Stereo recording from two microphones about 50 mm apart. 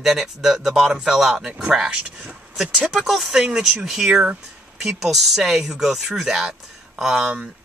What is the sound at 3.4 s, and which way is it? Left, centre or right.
Speech, right.